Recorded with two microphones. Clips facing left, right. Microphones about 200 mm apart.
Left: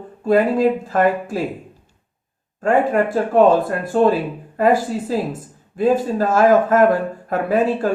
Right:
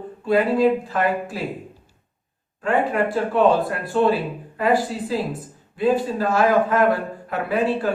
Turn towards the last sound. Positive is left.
turn(degrees=45)  # may be behind; listen again after turning